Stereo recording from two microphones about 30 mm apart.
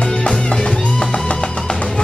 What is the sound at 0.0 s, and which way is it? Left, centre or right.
Music, left.